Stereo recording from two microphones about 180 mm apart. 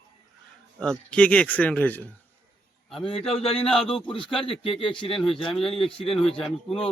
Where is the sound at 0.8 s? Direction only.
5° left (ahead or behind).